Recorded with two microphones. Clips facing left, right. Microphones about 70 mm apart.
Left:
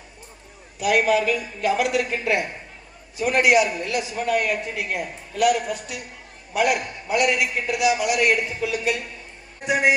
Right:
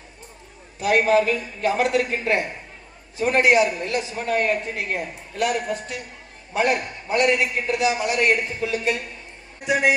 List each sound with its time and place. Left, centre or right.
0.8 s a man's voice: right
9.6 s speech: left